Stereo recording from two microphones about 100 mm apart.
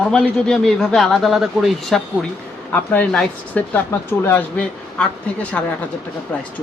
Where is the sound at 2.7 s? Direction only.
15° left (ahead or behind).